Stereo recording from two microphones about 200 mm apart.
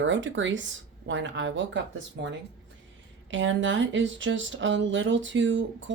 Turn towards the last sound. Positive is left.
turn(degrees=-65)  # may be behind; listen again after turning